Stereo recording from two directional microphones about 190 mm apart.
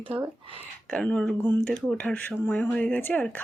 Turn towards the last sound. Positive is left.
turn(degrees=10)  # may be behind; listen again after turning